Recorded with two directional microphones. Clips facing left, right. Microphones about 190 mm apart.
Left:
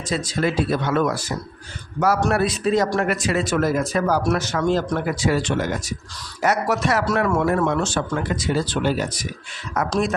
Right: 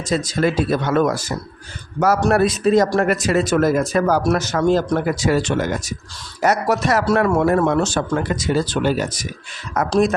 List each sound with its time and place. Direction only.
0.1 s speech: 40° right (ahead or behind)
9.9 s speech: 40° right (ahead or behind)